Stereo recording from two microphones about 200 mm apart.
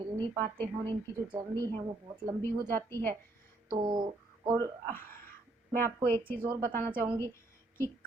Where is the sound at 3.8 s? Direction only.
20° right (ahead or behind).